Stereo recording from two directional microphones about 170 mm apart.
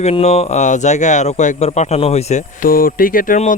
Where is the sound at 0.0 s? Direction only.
40° left (ahead or behind).